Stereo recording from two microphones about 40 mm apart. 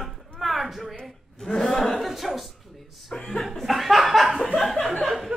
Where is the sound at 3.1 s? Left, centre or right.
Centre.